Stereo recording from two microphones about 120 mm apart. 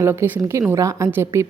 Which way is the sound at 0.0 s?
20° right (ahead or behind).